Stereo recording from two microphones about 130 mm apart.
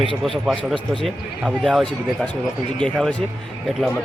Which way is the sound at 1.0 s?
5° right (ahead or behind).